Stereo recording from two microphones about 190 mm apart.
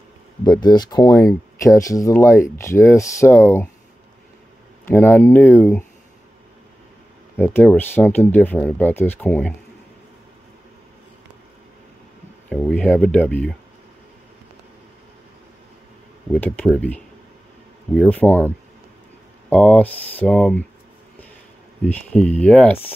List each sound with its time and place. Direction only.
0.5 s speech: 20° left (ahead or behind)
4.8 s speech: 10° left (ahead or behind)
7.3 s speech: 10° left (ahead or behind)
12.4 s speech: 5° left (ahead or behind)
16.3 s speech: 5° left (ahead or behind)
19.5 s speech: 5° left (ahead or behind)
21.8 s speech: 5° left (ahead or behind)